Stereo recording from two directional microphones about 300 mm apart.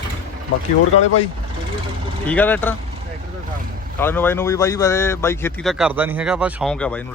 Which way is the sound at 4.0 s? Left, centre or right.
Centre.